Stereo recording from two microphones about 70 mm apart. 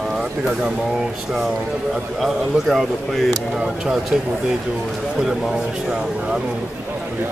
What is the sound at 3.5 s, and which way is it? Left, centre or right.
Speech, centre.